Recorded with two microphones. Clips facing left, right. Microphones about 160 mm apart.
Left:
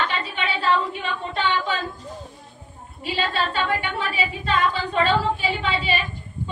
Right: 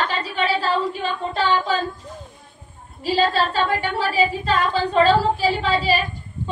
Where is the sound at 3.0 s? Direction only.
35° right (ahead or behind).